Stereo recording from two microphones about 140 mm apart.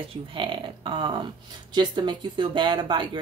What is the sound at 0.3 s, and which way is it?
Speech, 35° right (ahead or behind).